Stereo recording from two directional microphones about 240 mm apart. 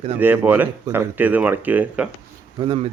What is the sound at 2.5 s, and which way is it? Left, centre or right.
Speech, right.